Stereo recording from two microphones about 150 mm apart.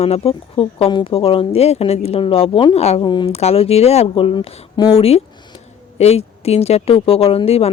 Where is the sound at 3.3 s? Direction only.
45° left (ahead or behind).